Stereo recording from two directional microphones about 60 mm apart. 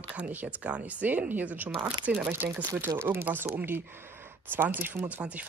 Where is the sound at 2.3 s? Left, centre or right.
Right.